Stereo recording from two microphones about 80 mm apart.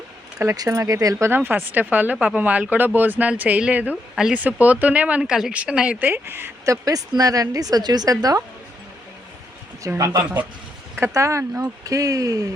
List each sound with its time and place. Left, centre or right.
0.3 s speech: right
1.3 s speech: right
4.1 s speech: centre
4.4 s speech: centre
6.7 s speech: right
10.0 s speech: right